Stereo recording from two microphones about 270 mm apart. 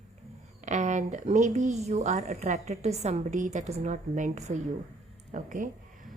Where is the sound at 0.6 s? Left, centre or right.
Right.